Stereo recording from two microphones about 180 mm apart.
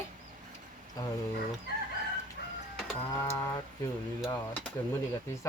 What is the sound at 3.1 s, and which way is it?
Speech, 15° left (ahead or behind).